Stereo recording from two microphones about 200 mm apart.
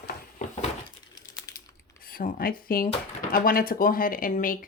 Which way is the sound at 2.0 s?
45° left (ahead or behind).